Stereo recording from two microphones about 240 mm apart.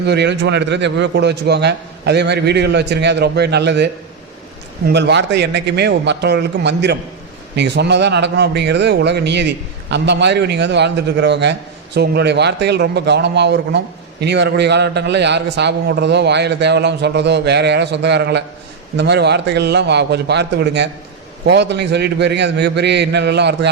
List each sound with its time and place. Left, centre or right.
0.0 s a man's voice: right
4.9 s a man's voice: right